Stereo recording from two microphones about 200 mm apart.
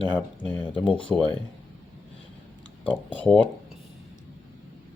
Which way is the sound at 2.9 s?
5° left (ahead or behind).